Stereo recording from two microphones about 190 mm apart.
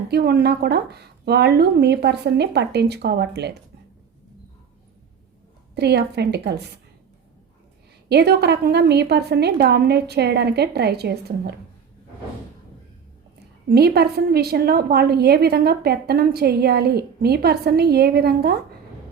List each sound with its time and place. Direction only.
0.1 s a woman's voice: 55° right (ahead or behind)
5.7 s a woman's voice: 60° right (ahead or behind)
8.1 s a woman's voice: 60° right (ahead or behind)
13.7 s a woman's voice: 55° right (ahead or behind)